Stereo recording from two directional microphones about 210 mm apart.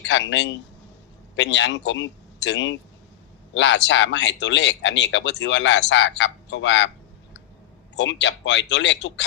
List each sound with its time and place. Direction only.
0.0 s a man's voice: 60° left (ahead or behind)
7.9 s speech: 60° left (ahead or behind)